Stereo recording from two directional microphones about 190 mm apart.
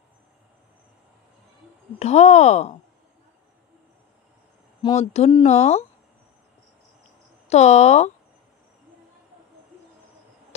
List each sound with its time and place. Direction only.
2.0 s speech: 35° left (ahead or behind)
5.0 s speech: 30° left (ahead or behind)
7.4 s speech: 35° left (ahead or behind)